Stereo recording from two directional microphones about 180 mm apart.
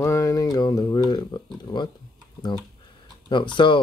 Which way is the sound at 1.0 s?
25° left (ahead or behind).